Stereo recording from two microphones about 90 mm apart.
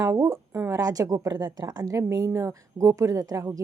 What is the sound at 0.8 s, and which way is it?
Speech, 40° right (ahead or behind).